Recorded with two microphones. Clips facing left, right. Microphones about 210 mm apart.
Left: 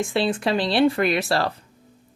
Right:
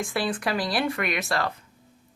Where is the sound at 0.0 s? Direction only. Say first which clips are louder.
Left 5 dB; 25° left (ahead or behind).